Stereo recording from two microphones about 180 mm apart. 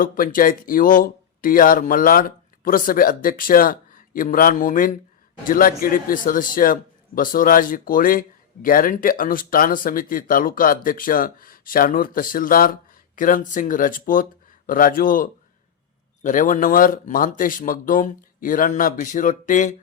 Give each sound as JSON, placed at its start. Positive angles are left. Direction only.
{"t": 0.0, "sound": "speech", "side_deg": 50}